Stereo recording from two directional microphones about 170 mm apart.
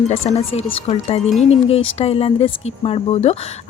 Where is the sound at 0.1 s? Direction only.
40° left (ahead or behind).